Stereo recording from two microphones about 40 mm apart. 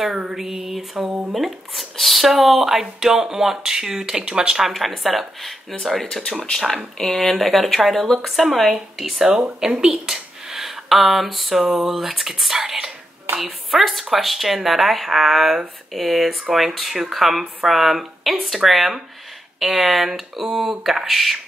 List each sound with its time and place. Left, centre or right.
0.0 s speech: centre
4.6 s speech: centre
7.0 s speech: centre
9.3 s speech: centre
10.0 s a sound: centre
13.4 s speech: centre